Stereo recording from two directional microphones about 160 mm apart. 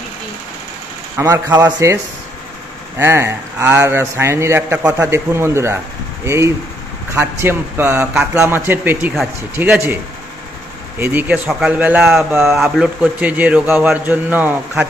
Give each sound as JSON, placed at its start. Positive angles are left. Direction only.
{"t": 1.1, "sound": "a man's voice", "side_deg": -15}
{"t": 3.0, "sound": "a man's voice", "side_deg": -15}
{"t": 11.0, "sound": "a man's voice", "side_deg": -10}